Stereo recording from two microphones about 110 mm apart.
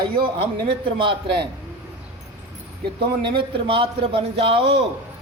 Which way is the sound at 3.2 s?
50° right (ahead or behind).